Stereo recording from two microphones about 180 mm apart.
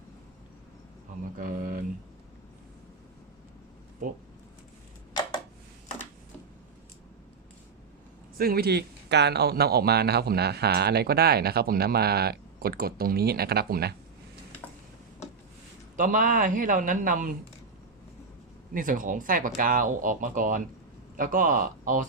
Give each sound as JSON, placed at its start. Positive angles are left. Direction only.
{"t": 1.4, "sound": "speech", "side_deg": -50}
{"t": 8.4, "sound": "speech", "side_deg": -60}
{"t": 16.0, "sound": "speech", "side_deg": -45}
{"t": 18.7, "sound": "speech", "side_deg": -50}